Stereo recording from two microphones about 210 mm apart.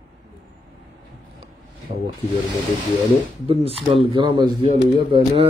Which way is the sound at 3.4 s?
25° right (ahead or behind).